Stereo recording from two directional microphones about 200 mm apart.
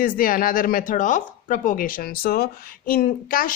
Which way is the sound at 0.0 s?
45° left (ahead or behind).